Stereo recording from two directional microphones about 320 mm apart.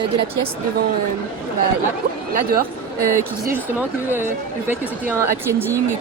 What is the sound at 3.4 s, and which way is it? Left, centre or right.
A woman's voice, centre.